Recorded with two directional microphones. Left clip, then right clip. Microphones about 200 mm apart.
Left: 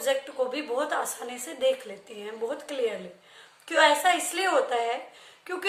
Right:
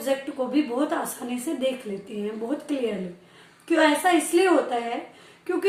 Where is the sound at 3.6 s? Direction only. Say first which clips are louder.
Right 1 dB; 15° left (ahead or behind).